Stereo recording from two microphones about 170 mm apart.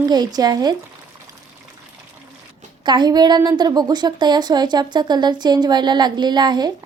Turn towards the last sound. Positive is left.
turn(degrees=-25)  # may be behind; listen again after turning